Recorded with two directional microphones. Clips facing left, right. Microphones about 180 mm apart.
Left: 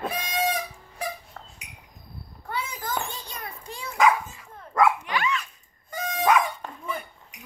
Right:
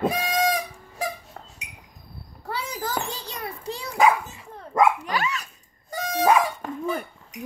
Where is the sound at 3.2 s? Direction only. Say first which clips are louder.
Right 4 dB; 30° right (ahead or behind).